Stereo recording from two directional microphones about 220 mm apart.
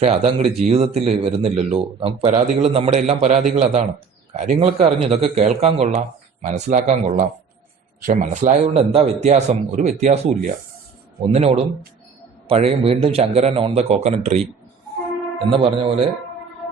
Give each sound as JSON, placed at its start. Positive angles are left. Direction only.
{"t": 0.0, "sound": "a man's voice", "side_deg": -25}
{"t": 15.4, "sound": "speech", "side_deg": -25}